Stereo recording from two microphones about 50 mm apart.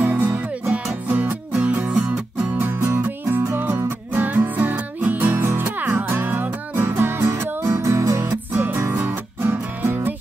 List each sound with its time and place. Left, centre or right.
0.0 s music: right
2.6 s music: right
6.0 s music: right
6.3 s music: right
7.2 s music: right
8.5 s music: right